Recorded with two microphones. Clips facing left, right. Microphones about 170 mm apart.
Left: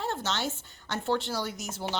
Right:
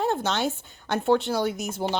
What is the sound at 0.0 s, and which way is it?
Speech, 55° right (ahead or behind).